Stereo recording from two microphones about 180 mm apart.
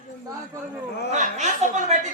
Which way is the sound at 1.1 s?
40° right (ahead or behind).